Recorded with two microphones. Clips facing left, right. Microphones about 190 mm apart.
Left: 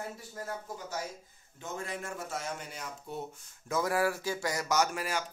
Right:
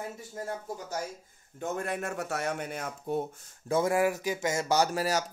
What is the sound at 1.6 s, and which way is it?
Speech, 55° right (ahead or behind).